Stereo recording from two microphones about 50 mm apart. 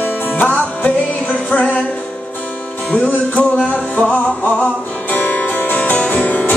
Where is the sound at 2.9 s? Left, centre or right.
Left.